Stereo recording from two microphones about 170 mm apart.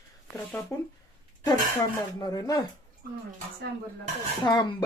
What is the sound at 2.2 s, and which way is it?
Speech, 20° left (ahead or behind).